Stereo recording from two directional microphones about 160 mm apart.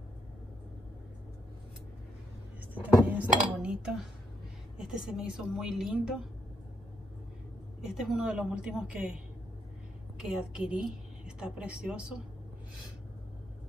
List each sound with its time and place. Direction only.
2.7 s a woman's voice: 10° right (ahead or behind)
7.9 s a woman's voice: 5° right (ahead or behind)